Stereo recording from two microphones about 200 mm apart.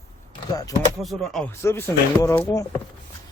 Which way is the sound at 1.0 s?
Centre (ahead or behind).